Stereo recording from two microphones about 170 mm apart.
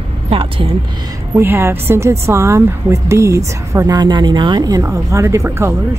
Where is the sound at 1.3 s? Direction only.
15° right (ahead or behind).